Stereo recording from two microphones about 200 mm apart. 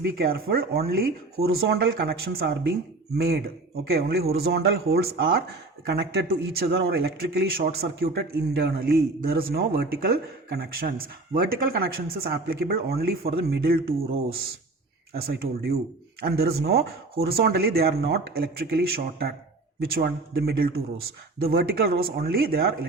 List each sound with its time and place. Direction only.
0.0 s speech: 50° right (ahead or behind)
15.1 s speech: 50° right (ahead or behind)